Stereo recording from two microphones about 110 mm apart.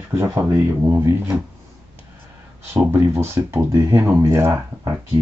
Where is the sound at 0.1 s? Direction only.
30° right (ahead or behind).